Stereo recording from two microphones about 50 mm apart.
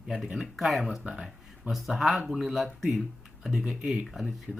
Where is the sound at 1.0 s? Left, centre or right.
Centre.